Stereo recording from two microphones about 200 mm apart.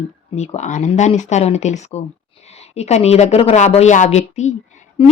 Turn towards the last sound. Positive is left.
turn(degrees=35)  # may be behind; listen again after turning